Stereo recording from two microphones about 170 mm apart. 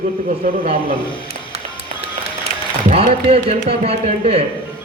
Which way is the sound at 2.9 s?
35° right (ahead or behind).